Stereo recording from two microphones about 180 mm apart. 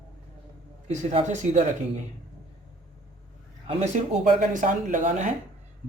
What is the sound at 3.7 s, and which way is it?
A man's voice, 40° right (ahead or behind).